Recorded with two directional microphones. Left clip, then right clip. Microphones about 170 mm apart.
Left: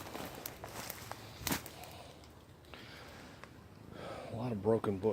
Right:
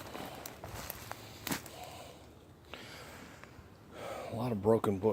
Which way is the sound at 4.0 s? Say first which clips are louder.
Right 4 dB; 40° right (ahead or behind).